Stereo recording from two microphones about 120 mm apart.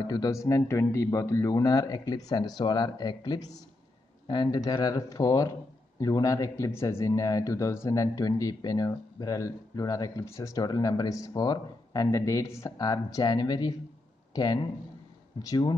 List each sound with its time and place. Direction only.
0.0 s speech: 35° left (ahead or behind)